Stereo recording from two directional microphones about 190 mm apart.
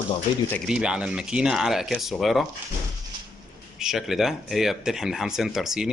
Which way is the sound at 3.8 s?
Centre (ahead or behind).